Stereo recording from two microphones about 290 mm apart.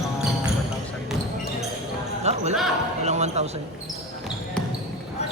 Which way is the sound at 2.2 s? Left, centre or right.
Right.